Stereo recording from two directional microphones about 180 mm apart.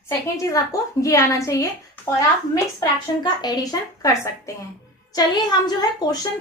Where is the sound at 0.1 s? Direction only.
15° left (ahead or behind).